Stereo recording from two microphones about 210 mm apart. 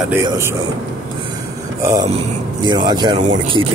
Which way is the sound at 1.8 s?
15° right (ahead or behind).